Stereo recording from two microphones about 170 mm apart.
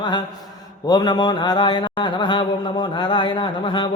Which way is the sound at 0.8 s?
25° left (ahead or behind).